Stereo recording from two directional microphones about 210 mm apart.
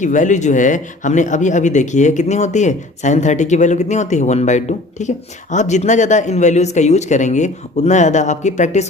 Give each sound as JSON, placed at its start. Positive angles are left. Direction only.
{"t": 0.0, "sound": "speech", "side_deg": 35}